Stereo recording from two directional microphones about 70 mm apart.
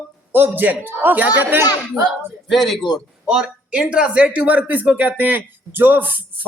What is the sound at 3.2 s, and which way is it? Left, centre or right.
A woman's voice, centre.